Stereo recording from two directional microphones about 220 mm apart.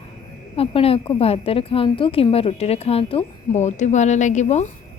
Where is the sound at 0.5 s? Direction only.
25° left (ahead or behind).